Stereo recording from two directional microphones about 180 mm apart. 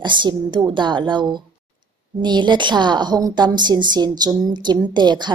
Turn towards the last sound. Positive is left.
turn(degrees=-25)  # may be behind; listen again after turning